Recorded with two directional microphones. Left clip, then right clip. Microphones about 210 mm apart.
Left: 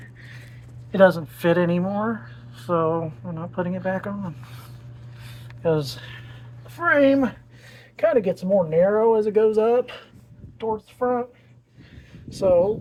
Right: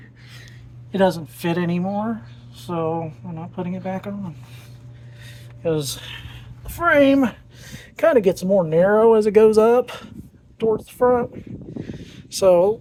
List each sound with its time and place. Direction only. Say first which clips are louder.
0.9 s speech: left 3 dB; centre (ahead or behind)
5.7 s speech: right 1 dB; 25° right (ahead or behind)
7.6 s speech: right 3 dB; 50° right (ahead or behind)
9.6 s a woman's voice: right 4 dB; 30° right (ahead or behind)
12.1 s a sound: right 3 dB; 45° right (ahead or behind)